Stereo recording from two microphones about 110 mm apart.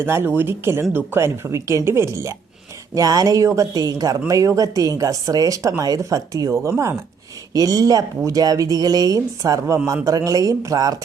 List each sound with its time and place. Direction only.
0.0 s speech: 20° right (ahead or behind)